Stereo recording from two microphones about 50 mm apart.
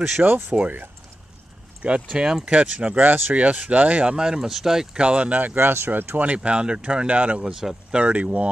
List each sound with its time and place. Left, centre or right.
0.2 s speech: right
1.8 s speech: right
3.0 s speech: right
3.4 s speech: right; by 4.8 s centre
4.9 s speech: right
6.2 s speech: right
8.0 s speech: right